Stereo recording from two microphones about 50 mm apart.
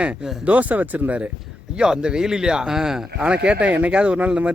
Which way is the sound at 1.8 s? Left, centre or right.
Centre.